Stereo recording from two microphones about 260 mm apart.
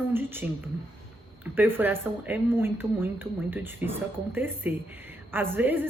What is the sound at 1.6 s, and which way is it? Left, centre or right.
A woman's voice, centre.